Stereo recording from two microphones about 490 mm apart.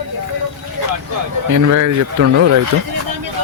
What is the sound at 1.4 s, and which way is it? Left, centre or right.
Speech, right.